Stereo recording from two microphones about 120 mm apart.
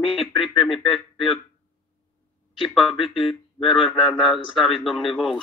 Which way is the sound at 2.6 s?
Centre (ahead or behind).